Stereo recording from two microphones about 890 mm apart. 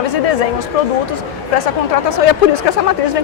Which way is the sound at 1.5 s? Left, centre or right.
Left.